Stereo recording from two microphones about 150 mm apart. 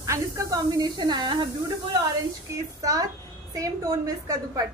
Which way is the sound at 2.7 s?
20° right (ahead or behind).